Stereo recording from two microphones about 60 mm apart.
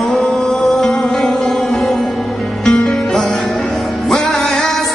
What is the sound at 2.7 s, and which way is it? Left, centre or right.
Music, centre.